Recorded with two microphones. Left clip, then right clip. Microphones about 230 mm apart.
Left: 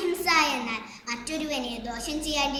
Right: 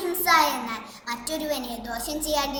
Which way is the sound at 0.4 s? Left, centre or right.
Centre.